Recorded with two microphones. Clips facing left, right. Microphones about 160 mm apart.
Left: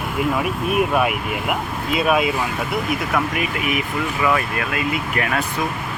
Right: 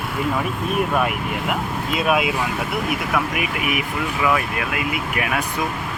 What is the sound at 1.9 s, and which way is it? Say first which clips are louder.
Speech: left 2 dB; centre (ahead or behind).